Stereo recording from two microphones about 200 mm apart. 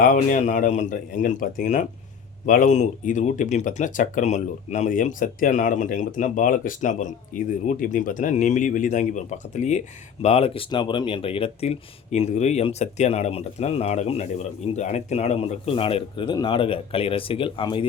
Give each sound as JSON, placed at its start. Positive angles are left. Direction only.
{"t": 0.0, "sound": "speech", "side_deg": 40}